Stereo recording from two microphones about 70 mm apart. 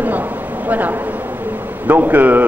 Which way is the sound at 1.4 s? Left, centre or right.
Right.